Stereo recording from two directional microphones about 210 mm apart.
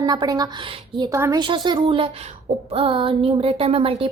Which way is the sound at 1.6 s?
20° right (ahead or behind).